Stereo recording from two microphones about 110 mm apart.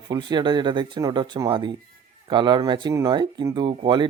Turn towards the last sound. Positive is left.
turn(degrees=-45)  # may be behind; listen again after turning